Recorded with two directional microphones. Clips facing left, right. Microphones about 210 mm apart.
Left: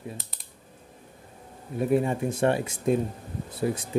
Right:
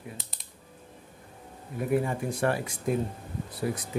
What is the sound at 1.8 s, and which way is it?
Speech, 25° left (ahead or behind).